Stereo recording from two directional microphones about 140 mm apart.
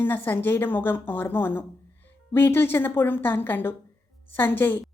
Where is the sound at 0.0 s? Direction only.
15° left (ahead or behind).